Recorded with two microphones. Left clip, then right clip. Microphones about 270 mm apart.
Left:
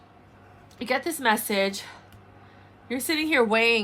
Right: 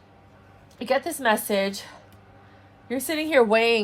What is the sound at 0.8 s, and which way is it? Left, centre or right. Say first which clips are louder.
A woman's voice: right 2 dB; centre.